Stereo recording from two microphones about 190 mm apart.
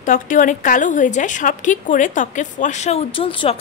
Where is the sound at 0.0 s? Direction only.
45° left (ahead or behind).